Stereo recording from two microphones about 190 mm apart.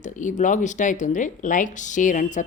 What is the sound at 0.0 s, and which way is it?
Speech, 40° left (ahead or behind).